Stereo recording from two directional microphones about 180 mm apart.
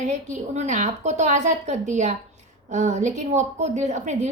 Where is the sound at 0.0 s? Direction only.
40° right (ahead or behind).